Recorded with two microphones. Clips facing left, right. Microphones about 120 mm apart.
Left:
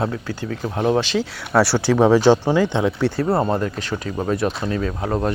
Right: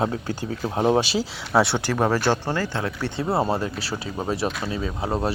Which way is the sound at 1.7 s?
5° left (ahead or behind).